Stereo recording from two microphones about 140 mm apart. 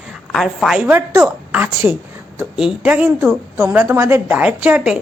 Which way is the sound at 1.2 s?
15° right (ahead or behind).